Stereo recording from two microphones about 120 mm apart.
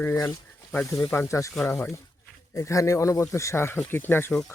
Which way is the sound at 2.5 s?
25° left (ahead or behind).